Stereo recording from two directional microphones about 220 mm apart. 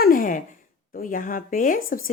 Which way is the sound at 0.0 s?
40° left (ahead or behind).